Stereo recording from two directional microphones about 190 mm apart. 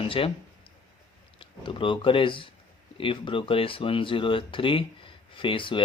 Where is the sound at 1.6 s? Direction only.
25° left (ahead or behind).